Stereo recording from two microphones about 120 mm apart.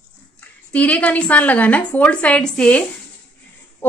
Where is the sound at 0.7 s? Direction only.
10° left (ahead or behind).